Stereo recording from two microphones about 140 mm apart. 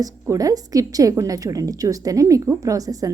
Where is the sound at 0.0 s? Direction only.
25° right (ahead or behind).